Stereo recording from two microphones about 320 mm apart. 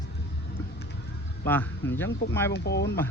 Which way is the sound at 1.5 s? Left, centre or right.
Centre.